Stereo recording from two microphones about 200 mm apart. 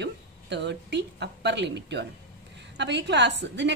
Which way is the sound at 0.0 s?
60° right (ahead or behind).